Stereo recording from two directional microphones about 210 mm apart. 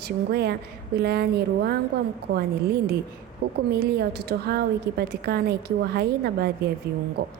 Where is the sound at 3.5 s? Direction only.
50° right (ahead or behind).